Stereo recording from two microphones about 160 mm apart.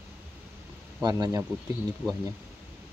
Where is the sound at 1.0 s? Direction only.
25° right (ahead or behind).